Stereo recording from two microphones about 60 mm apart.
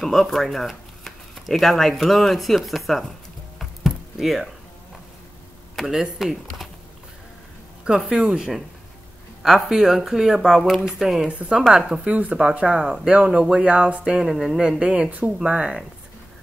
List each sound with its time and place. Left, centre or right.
0.0 s speech: centre
3.5 s a sound: centre
5.9 s speech: centre
8.1 s speech: centre
11.2 s speech: centre
12.0 s speech: right
14.2 s speech: centre
14.6 s speech: centre